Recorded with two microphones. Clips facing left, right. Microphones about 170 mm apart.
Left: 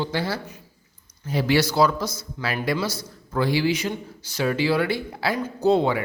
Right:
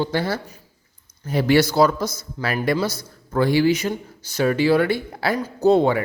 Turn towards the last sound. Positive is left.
turn(degrees=-50)  # may be behind; listen again after turning